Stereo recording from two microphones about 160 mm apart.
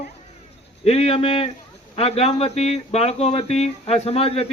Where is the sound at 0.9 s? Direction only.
40° left (ahead or behind).